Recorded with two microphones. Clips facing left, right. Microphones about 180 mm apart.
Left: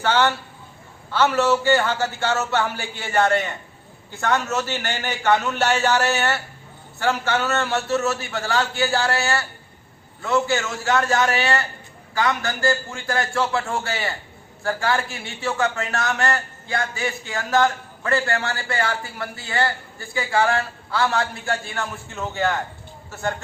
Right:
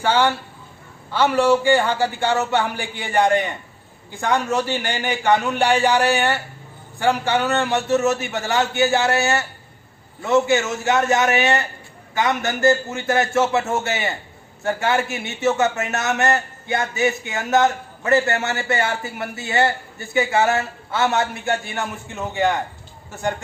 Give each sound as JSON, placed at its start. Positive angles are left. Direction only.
{"t": 0.0, "sound": "a man's voice", "side_deg": -10}